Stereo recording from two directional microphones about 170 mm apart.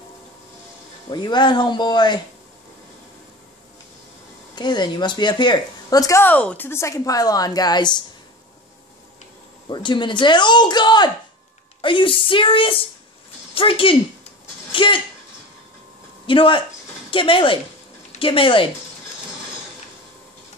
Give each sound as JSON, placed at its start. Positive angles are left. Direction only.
{"t": 1.1, "sound": "speech", "side_deg": 25}
{"t": 4.6, "sound": "speech", "side_deg": 25}
{"t": 9.7, "sound": "a woman's voice", "side_deg": 30}
{"t": 14.7, "sound": "a sound", "side_deg": 30}
{"t": 16.3, "sound": "a woman's voice", "side_deg": 30}